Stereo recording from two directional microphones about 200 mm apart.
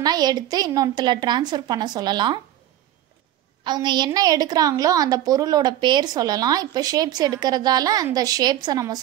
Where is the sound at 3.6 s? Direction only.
20° right (ahead or behind).